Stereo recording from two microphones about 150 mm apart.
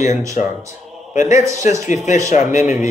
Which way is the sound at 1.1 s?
55° left (ahead or behind).